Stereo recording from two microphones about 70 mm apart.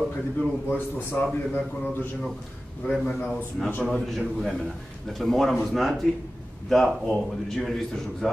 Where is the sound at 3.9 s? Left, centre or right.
Centre.